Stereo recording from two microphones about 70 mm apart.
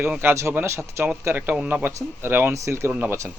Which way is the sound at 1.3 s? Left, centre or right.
Right.